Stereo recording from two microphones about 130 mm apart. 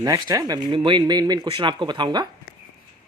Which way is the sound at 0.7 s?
40° right (ahead or behind).